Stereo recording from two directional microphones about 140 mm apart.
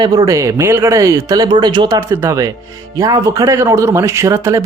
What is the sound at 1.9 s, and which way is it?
Speech, 20° right (ahead or behind).